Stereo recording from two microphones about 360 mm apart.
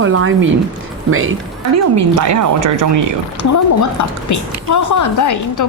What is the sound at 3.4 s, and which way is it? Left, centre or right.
A woman's voice, left.